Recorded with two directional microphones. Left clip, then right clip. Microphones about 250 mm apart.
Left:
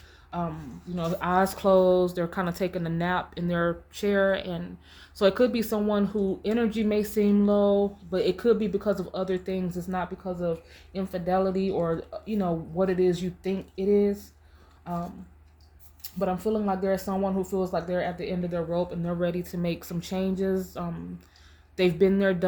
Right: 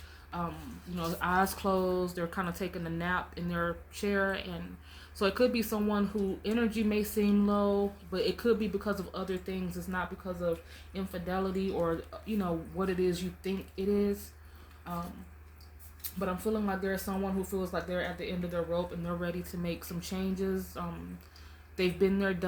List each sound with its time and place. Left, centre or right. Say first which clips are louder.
0.9 s speech: left 5 dB; left
16.1 s speech: left 6 dB; left